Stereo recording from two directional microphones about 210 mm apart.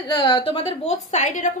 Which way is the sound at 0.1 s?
20° left (ahead or behind).